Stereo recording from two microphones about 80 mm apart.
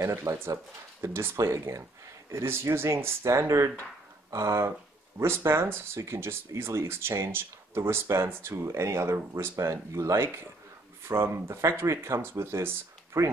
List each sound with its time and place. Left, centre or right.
0.0 s speech: right